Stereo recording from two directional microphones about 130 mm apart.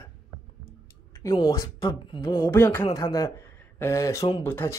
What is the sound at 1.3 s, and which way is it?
Speech, 40° left (ahead or behind).